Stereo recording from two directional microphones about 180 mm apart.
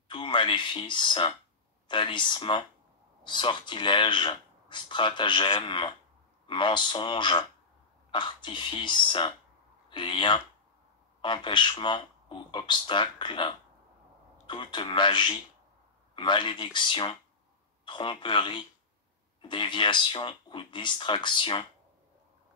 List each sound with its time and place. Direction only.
0.1 s speech: 25° left (ahead or behind)